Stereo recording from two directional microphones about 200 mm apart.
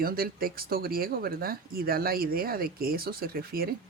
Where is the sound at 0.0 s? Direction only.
45° right (ahead or behind).